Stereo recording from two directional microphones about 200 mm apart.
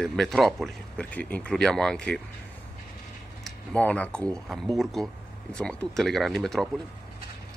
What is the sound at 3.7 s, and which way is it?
Speech, 5° left (ahead or behind).